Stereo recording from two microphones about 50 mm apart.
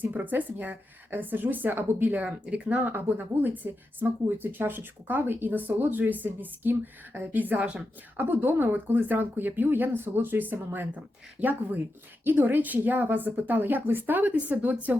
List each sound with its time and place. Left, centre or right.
0.0 s speech: right
2.2 s speech: right